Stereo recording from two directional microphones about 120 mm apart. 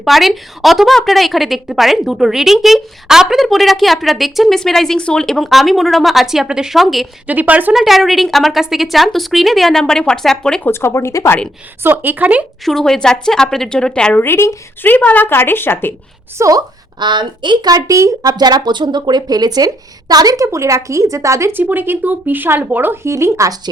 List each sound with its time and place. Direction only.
0.0 s a woman's voice: centre (ahead or behind)
7.3 s a woman's voice: 15° right (ahead or behind); by 10.7 s 5° left (ahead or behind)
10.7 s speech: 20° left (ahead or behind)
11.8 s speech: 15° right (ahead or behind)
12.6 s a woman's voice: 5° left (ahead or behind)
16.4 s speech: 30° right (ahead or behind)